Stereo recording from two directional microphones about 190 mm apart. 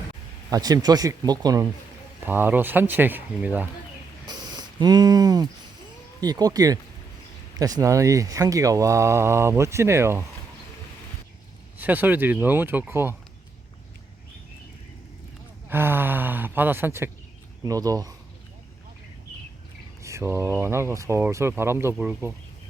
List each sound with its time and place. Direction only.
0.5 s speech: 20° right (ahead or behind)
4.5 s a sound: 20° right (ahead or behind)
6.1 s speech: 20° right (ahead or behind)
11.8 s speech: 10° right (ahead or behind)
15.7 s speech: 10° right (ahead or behind)
20.0 s speech: 15° right (ahead or behind)